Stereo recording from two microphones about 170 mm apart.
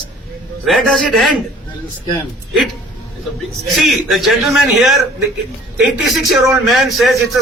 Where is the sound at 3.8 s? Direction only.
Centre (ahead or behind).